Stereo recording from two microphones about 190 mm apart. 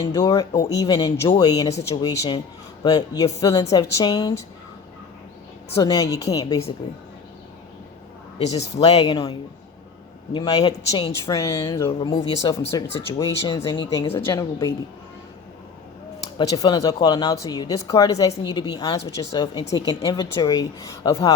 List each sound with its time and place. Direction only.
0.0 s a woman's voice: 15° left (ahead or behind)
5.7 s a woman's voice: 20° left (ahead or behind)
8.4 s speech: 35° left (ahead or behind)
10.3 s a woman's voice: 30° left (ahead or behind)
11.9 s a woman's voice: 30° left (ahead or behind)
16.4 s a woman's voice: 20° left (ahead or behind)